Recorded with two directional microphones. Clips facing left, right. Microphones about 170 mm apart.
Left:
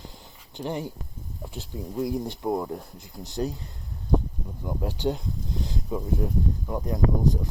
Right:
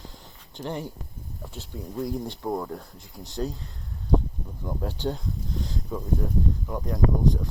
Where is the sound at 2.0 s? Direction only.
10° left (ahead or behind).